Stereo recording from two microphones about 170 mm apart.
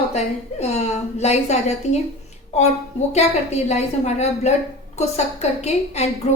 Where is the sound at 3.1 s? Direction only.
40° left (ahead or behind).